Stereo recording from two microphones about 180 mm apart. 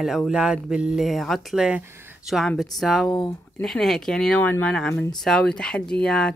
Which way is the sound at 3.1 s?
20° left (ahead or behind).